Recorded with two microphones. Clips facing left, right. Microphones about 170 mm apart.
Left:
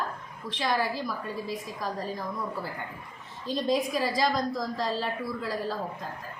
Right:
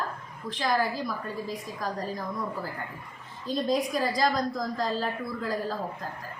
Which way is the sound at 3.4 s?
Centre (ahead or behind).